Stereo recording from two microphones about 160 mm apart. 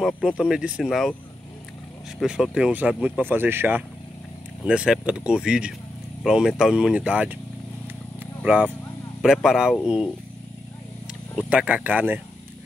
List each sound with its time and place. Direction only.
0.0 s speech: centre (ahead or behind)
2.1 s speech: 5° right (ahead or behind)
8.5 s speech: 10° right (ahead or behind)
11.4 s speech: 10° right (ahead or behind)